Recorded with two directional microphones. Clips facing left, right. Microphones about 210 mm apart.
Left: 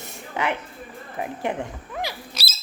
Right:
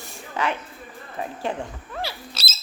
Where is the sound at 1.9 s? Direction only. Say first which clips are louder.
Left 1 dB; 15° left (ahead or behind).